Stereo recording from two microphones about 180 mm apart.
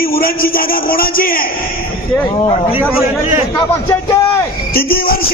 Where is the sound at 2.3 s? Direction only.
30° left (ahead or behind).